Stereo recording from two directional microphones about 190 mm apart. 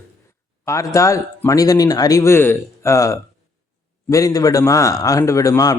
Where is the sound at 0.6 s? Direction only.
15° left (ahead or behind).